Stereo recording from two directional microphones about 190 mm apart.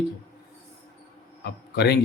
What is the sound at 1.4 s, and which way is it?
Speech, 60° left (ahead or behind).